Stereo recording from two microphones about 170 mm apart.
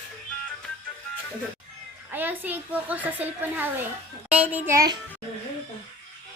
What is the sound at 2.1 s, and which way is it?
A child's voice, 10° right (ahead or behind).